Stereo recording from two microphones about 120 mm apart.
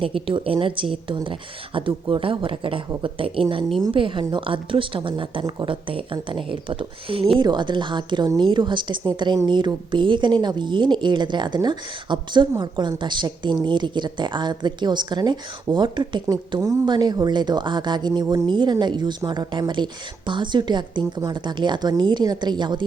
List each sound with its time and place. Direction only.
0.0 s a woman's voice: 45° right (ahead or behind)